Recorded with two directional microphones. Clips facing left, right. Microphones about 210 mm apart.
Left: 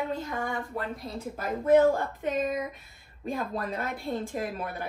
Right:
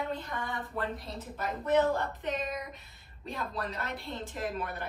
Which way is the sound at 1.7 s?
50° left (ahead or behind).